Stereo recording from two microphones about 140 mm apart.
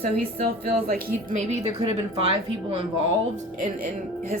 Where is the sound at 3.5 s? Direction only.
65° right (ahead or behind).